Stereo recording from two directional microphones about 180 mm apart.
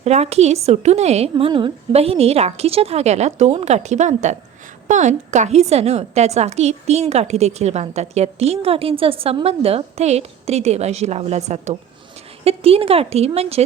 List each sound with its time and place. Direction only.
0.0 s a woman's voice: 35° right (ahead or behind)